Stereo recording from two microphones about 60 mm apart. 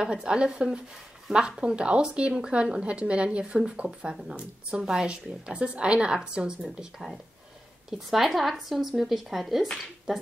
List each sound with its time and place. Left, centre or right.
0.0 s a woman's voice: centre